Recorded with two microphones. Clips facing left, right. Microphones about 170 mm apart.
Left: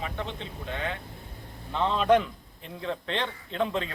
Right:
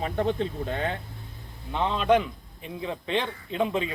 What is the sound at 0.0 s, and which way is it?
Speech, 45° right (ahead or behind).